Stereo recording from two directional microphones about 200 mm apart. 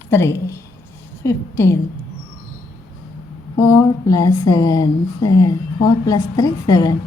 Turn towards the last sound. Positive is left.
turn(degrees=20)  # may be behind; listen again after turning